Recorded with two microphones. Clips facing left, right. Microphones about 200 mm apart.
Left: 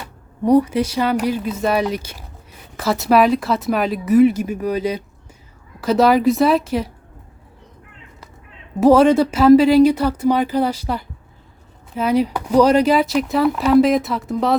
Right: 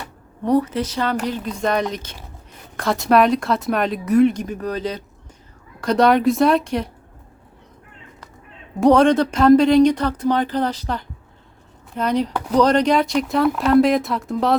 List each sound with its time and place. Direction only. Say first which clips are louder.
0.4 s speech: left 4 dB; 10° left (ahead or behind)
8.8 s speech: left 2 dB; 5° left (ahead or behind)